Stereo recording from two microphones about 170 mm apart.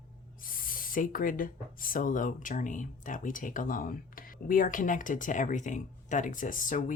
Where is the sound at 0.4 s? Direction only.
55° left (ahead or behind).